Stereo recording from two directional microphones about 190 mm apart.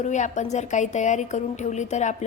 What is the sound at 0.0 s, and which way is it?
Speech, 40° left (ahead or behind).